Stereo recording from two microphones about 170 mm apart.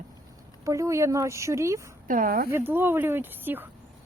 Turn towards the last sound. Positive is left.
turn(degrees=-10)  # may be behind; listen again after turning